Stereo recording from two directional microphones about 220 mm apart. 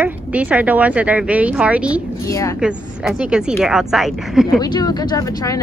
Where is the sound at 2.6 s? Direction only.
5° right (ahead or behind).